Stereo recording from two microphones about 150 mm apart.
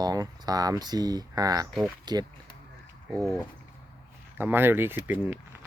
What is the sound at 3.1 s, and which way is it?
Speech, centre (ahead or behind).